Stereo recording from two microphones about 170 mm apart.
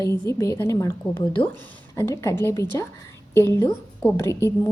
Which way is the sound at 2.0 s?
15° left (ahead or behind).